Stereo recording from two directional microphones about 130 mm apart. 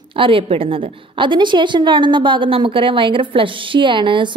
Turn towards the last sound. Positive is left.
turn(degrees=-40)  # may be behind; listen again after turning